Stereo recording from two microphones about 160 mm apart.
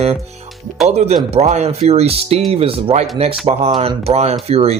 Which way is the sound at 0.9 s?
40° right (ahead or behind).